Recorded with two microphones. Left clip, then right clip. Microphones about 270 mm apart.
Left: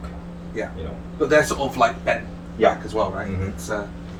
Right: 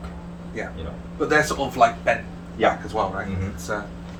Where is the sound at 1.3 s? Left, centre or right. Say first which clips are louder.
Left 2 dB; centre.